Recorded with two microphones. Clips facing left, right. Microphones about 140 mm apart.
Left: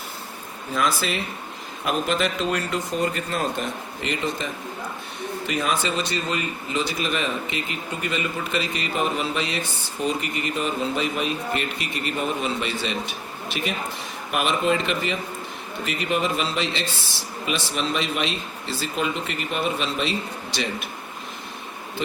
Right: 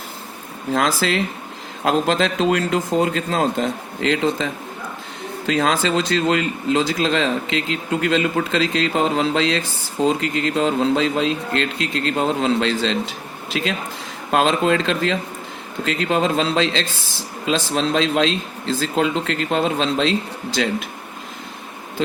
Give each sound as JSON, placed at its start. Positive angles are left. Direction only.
{"t": 0.7, "sound": "a man's voice", "side_deg": -90}
{"t": 5.5, "sound": "a man's voice", "side_deg": -90}